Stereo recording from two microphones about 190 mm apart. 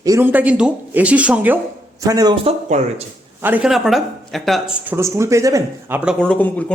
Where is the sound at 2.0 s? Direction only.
20° right (ahead or behind); by 2.8 s 35° right (ahead or behind).